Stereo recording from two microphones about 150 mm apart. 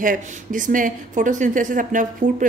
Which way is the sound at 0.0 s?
60° right (ahead or behind).